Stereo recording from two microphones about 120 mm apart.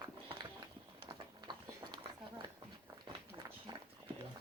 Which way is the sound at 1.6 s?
35° right (ahead or behind).